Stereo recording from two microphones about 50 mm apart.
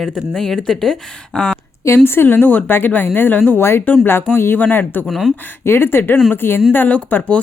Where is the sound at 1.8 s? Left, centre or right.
Left.